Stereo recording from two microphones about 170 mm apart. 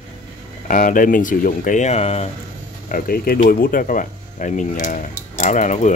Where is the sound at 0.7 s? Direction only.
50° left (ahead or behind).